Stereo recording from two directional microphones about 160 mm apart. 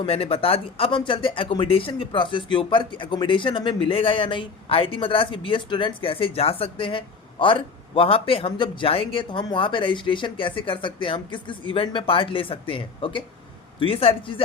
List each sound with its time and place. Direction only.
0.0 s speech: 35° left (ahead or behind)